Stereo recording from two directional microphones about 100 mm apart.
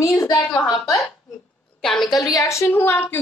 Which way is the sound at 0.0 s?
30° left (ahead or behind).